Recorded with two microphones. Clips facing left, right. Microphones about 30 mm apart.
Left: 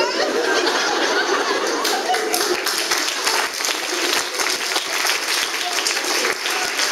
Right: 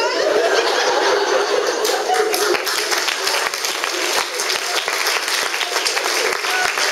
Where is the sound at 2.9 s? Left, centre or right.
Centre.